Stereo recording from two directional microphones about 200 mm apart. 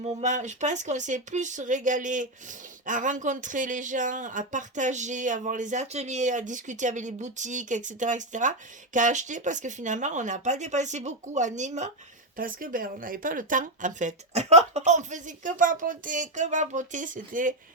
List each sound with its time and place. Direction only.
0.0 s speech: 35° right (ahead or behind)